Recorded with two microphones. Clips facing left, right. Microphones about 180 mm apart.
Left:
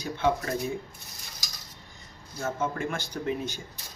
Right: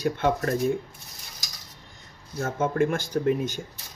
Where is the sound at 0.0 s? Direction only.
55° right (ahead or behind).